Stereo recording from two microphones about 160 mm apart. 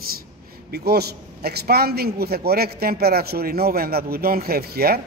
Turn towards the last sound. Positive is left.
turn(degrees=-75)  # may be behind; listen again after turning